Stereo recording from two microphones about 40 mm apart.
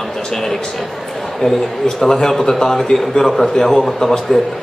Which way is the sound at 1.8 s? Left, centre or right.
Centre.